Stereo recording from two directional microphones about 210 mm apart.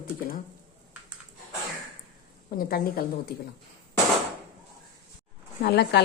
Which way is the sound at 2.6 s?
45° left (ahead or behind).